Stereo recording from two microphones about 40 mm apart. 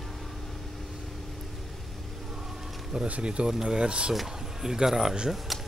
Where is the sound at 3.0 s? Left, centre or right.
Right.